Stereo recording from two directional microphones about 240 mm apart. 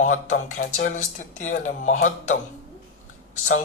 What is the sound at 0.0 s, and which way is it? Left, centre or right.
Speech, left.